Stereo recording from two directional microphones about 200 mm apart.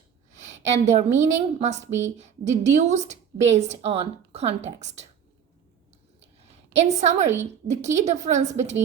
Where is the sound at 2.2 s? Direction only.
35° right (ahead or behind).